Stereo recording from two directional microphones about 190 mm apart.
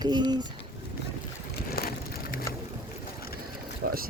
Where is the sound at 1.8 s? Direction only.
50° left (ahead or behind).